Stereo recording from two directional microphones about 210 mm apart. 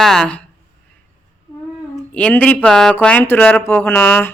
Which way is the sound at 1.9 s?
5° left (ahead or behind).